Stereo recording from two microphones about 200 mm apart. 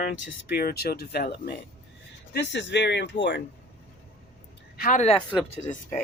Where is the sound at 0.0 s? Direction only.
50° left (ahead or behind).